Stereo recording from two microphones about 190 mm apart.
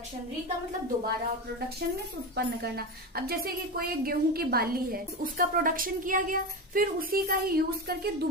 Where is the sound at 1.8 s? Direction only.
55° right (ahead or behind).